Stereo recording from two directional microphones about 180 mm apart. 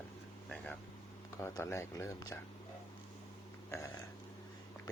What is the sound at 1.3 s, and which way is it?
Speech, 15° left (ahead or behind).